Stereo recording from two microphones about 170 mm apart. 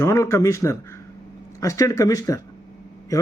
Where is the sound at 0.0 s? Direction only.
15° left (ahead or behind).